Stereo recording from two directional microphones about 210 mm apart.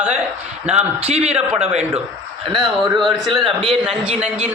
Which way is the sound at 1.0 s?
30° right (ahead or behind).